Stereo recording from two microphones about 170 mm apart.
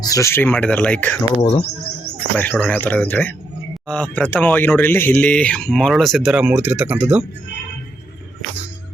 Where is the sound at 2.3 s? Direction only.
10° left (ahead or behind); by 7.3 s 10° right (ahead or behind).